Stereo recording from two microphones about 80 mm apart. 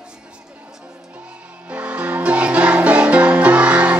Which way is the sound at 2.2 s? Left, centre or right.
Centre.